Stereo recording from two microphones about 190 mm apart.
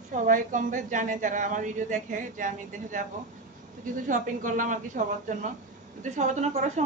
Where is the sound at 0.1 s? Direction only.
40° right (ahead or behind).